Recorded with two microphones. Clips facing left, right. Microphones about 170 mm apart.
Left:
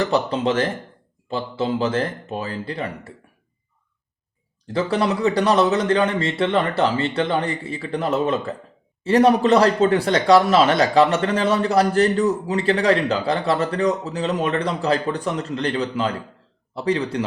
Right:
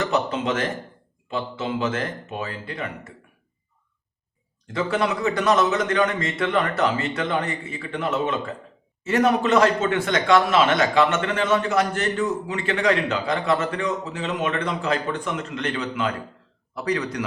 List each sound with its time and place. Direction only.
0.0 s a man's voice: 35° left (ahead or behind)
4.6 s a man's voice: 35° left (ahead or behind)